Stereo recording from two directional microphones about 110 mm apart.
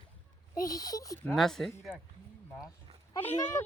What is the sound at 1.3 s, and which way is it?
Speech, 5° left (ahead or behind).